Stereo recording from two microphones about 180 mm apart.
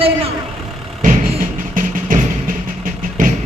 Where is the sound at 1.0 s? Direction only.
50° right (ahead or behind).